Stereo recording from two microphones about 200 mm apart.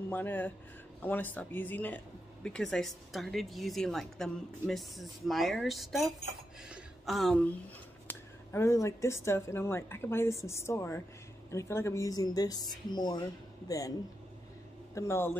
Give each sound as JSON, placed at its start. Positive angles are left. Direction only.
{"t": 0.1, "sound": "speech", "side_deg": 10}
{"t": 8.1, "sound": "speech", "side_deg": 10}
{"t": 15.0, "sound": "speech", "side_deg": 10}